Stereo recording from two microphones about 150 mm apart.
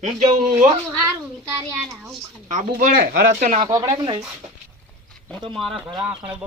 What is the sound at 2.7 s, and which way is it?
Speech, 70° right (ahead or behind).